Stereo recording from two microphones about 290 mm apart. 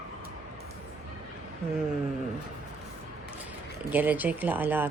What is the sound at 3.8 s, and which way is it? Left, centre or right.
A woman's voice, centre.